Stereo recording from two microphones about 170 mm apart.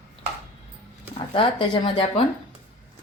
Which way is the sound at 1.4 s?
30° left (ahead or behind).